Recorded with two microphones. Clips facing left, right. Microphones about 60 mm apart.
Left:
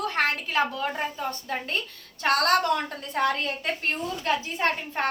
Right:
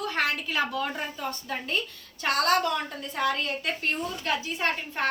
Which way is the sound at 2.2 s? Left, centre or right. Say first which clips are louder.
Left 3 dB; left.